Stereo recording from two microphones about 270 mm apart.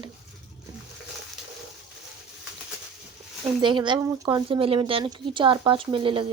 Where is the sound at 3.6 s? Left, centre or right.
Centre.